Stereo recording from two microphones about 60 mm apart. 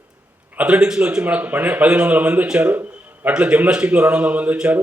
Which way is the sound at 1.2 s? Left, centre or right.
Right.